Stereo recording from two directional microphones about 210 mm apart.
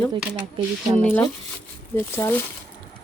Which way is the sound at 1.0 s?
10° left (ahead or behind).